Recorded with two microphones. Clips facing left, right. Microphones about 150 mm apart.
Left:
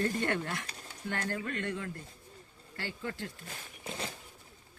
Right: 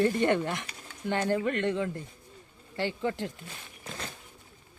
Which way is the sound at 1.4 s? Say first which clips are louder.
Right 8 dB; 90° right.